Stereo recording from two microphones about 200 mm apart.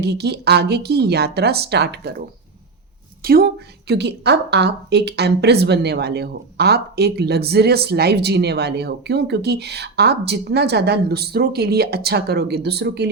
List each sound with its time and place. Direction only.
0.0 s speech: 55° right (ahead or behind)
3.2 s a woman's voice: 50° right (ahead or behind)